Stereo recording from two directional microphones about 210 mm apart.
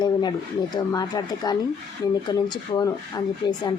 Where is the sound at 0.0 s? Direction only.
20° left (ahead or behind).